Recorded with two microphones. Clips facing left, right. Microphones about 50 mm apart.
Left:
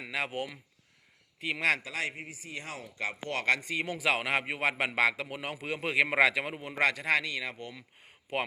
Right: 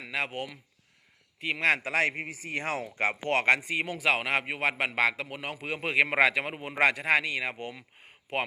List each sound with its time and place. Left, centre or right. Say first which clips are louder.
0.0 s speech: right 1 dB; centre
1.4 s a man's voice: right 2 dB; centre
1.8 s a man's voice: right 8 dB; right
3.6 s a man's voice: right 3 dB; centre
3.8 s a man's voice: right 1 dB; centre